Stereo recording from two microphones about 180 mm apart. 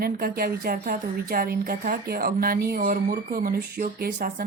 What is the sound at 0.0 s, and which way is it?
A woman's voice, 55° right (ahead or behind).